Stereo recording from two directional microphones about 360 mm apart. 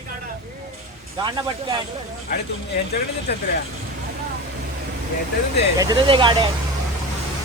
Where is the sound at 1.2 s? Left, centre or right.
Centre.